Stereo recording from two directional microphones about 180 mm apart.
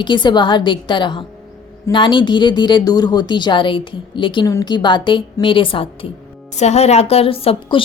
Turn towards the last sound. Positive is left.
turn(degrees=30)  # may be behind; listen again after turning